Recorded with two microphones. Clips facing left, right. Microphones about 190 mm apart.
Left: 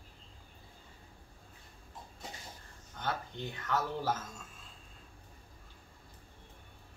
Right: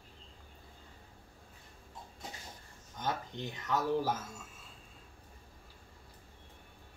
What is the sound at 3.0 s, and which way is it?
Speech, 15° right (ahead or behind).